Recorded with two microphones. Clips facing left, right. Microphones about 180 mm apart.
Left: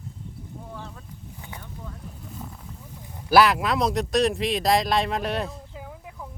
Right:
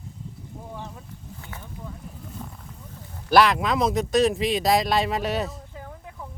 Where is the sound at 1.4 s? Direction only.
15° left (ahead or behind).